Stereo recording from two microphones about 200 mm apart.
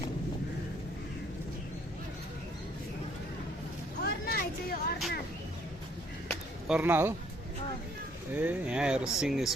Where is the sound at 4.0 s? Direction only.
50° left (ahead or behind).